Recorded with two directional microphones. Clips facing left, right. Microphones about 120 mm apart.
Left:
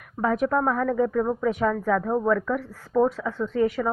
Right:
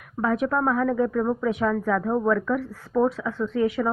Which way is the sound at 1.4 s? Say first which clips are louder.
Even; 45° left (ahead or behind).